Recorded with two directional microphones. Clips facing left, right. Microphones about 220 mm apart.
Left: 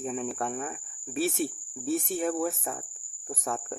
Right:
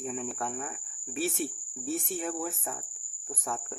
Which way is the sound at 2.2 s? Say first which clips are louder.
Left 6 dB; 50° left (ahead or behind).